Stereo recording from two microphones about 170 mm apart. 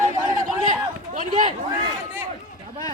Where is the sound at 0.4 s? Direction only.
50° right (ahead or behind).